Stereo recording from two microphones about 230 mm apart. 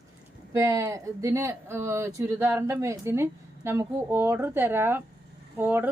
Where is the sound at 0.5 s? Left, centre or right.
Centre.